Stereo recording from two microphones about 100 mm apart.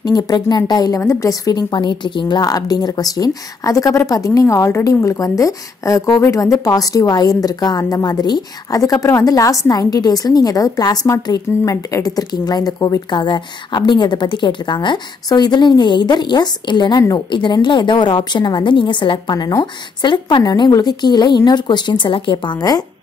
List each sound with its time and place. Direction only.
0.0 s a woman's voice: 40° left (ahead or behind)
22.6 s a woman's voice: 40° left (ahead or behind)